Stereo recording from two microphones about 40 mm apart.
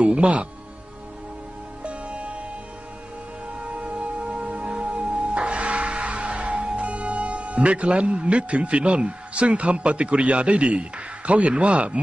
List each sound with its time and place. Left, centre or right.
0.0 s speech: right
1.8 s music: right
3.6 s music: right